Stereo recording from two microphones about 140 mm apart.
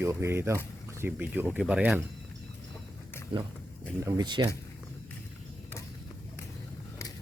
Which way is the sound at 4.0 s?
25° right (ahead or behind).